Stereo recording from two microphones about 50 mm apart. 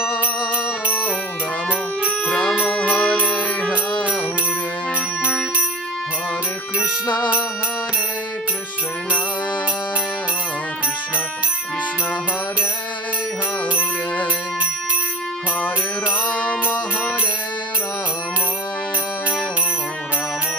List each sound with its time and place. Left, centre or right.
2.2 s music: left
15.6 s music: left